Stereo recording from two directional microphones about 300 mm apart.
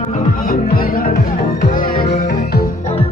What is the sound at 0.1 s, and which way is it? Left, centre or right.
Music, left.